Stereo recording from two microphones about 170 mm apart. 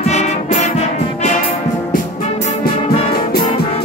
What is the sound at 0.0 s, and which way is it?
Music, 40° left (ahead or behind).